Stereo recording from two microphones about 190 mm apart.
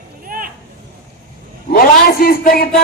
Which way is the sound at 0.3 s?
50° right (ahead or behind).